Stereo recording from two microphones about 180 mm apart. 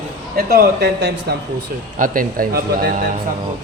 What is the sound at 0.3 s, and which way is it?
Speech, 60° right (ahead or behind).